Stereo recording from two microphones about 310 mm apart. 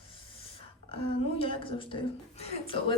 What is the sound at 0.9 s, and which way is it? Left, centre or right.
A woman's voice, centre.